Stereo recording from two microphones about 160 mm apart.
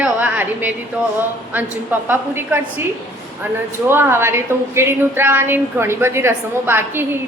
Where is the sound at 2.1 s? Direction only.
15° right (ahead or behind).